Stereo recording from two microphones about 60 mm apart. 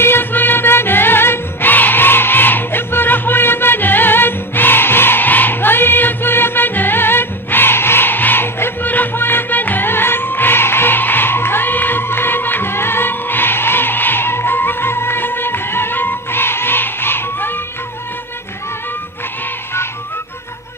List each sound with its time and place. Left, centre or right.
0.0 s music: left